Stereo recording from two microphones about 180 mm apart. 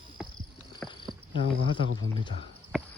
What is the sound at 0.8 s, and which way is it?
Cricket, 5° left (ahead or behind).